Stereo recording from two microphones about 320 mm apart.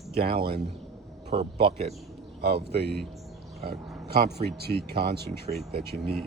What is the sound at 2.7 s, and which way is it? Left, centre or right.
Speech, right.